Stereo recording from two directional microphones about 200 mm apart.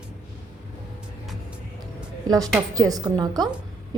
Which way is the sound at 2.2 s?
15° right (ahead or behind).